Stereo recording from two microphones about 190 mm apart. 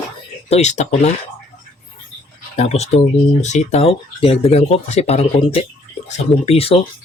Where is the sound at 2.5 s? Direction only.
35° left (ahead or behind).